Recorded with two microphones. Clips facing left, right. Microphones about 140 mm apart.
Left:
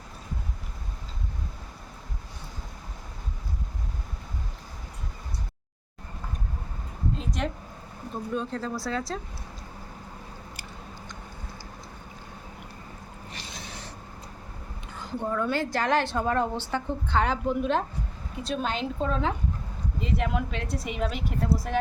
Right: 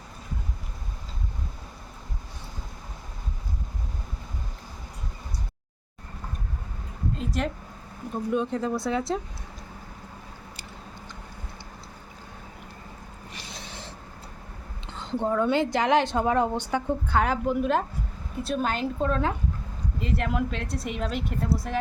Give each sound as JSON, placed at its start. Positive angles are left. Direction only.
{"t": 7.2, "sound": "a sound", "side_deg": 0}
{"t": 8.3, "sound": "a woman's voice", "side_deg": -20}
{"t": 14.8, "sound": "a woman's voice", "side_deg": -25}